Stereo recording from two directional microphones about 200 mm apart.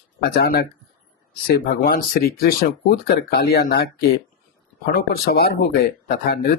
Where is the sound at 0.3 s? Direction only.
50° left (ahead or behind).